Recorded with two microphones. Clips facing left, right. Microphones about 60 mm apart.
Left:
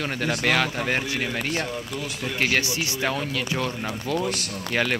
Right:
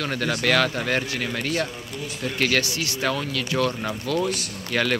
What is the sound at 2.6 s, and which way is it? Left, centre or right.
Speech, left.